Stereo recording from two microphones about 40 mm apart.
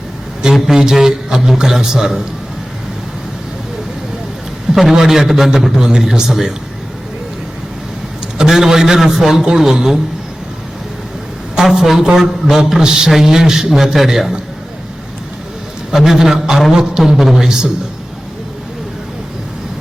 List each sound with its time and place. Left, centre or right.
0.7 s a man's voice: centre
4.7 s a man's voice: centre
8.4 s a man's voice: centre
11.5 s a man's voice: centre
15.9 s a man's voice: centre